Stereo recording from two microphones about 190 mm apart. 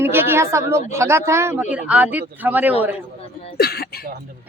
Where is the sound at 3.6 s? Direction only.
55° left (ahead or behind).